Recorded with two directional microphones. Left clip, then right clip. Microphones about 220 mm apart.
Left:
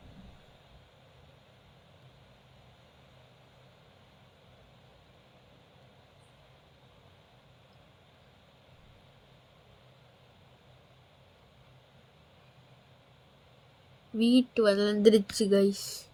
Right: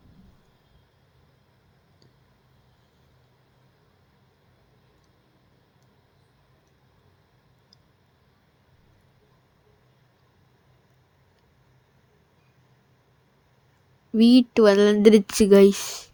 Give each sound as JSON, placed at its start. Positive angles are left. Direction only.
{"t": 14.2, "sound": "speech", "side_deg": -35}